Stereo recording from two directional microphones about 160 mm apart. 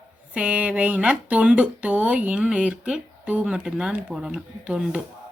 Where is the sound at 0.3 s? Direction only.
10° right (ahead or behind).